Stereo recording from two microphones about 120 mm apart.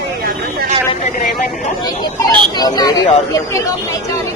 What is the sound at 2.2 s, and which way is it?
Speech, 35° left (ahead or behind).